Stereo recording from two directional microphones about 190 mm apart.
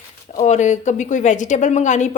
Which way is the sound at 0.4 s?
40° left (ahead or behind).